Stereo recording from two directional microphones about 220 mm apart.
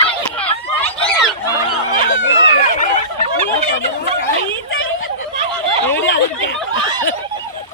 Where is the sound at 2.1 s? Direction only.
60° left (ahead or behind).